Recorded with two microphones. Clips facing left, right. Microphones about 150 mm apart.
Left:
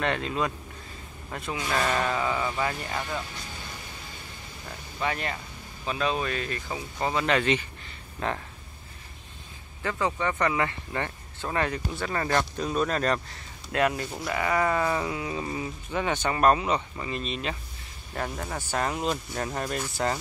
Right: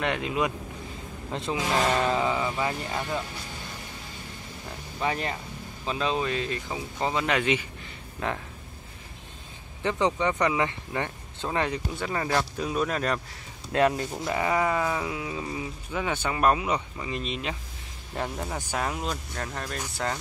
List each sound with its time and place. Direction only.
0.0 s speech: 15° right (ahead or behind)
1.3 s speech: 25° right (ahead or behind)
5.0 s speech: 25° right (ahead or behind); by 7.6 s 10° right (ahead or behind)
9.8 s speech: 20° right (ahead or behind)
13.7 s speech: 30° right (ahead or behind)
14.6 s speech: 5° right (ahead or behind)
19.3 s speech: 10° left (ahead or behind)